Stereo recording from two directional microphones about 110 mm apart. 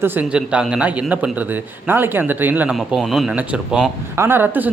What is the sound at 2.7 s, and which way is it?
A man's voice, 5° right (ahead or behind).